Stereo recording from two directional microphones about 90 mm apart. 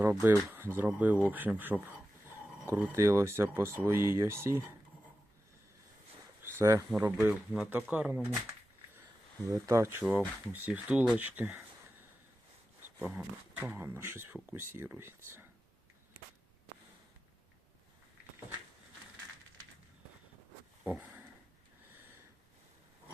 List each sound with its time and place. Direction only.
0.0 s speech: 20° right (ahead or behind)
2.9 s speech: 30° right (ahead or behind)
6.4 s speech: 30° right (ahead or behind)
7.2 s speech: 10° right (ahead or behind)
9.5 s speech: 35° right (ahead or behind)
10.0 s speech: 20° right (ahead or behind)
13.1 s speech: 20° right (ahead or behind)
20.8 s a sound: 20° right (ahead or behind)